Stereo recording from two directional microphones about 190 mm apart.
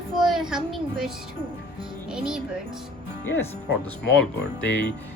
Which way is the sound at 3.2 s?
10° left (ahead or behind).